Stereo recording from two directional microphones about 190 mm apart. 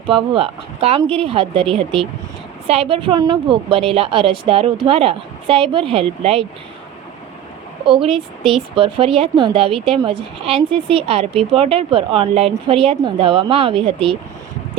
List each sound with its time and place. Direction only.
0.1 s speech: 30° right (ahead or behind)
7.9 s speech: 30° right (ahead or behind)